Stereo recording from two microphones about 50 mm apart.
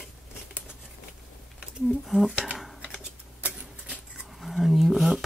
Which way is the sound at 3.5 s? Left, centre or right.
Right.